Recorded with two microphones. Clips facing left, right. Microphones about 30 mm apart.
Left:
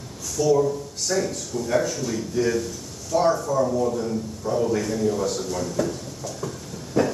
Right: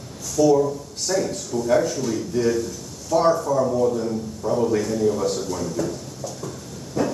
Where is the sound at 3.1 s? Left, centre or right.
Centre.